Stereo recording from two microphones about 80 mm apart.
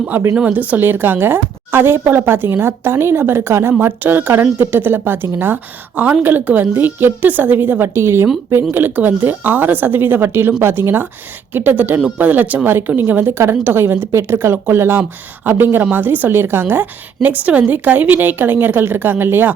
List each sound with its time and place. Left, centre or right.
0.3 s a woman's voice: centre